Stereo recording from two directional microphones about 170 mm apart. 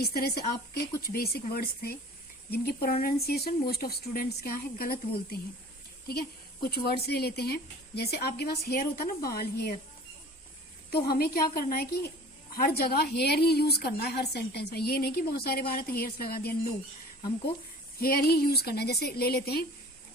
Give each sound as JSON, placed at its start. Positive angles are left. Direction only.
{"t": 0.0, "sound": "speech", "side_deg": 65}
{"t": 10.9, "sound": "a woman's voice", "side_deg": 65}
{"t": 18.0, "sound": "a woman's voice", "side_deg": 65}